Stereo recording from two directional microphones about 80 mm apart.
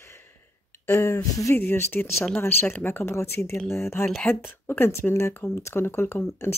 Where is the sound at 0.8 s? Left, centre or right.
Left.